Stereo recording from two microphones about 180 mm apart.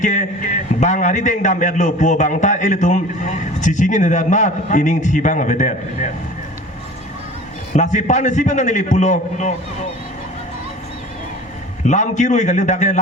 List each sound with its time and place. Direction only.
0.0 s a man's voice: 45° left (ahead or behind)
7.7 s a man's voice: 40° left (ahead or behind)
11.8 s a man's voice: 40° left (ahead or behind)